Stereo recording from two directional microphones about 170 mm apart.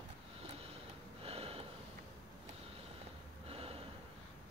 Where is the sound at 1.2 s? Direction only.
35° right (ahead or behind).